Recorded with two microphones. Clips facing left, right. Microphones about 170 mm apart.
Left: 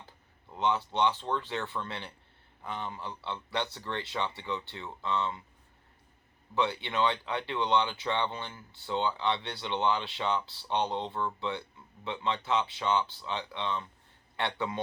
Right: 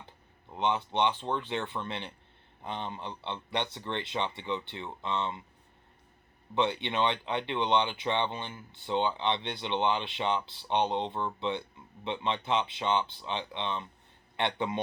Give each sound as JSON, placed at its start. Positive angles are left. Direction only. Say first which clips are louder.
{"t": 0.5, "sound": "speech", "louder": "even", "side_deg": -20}
{"t": 6.5, "sound": "speech", "louder": "right 1 dB", "side_deg": -20}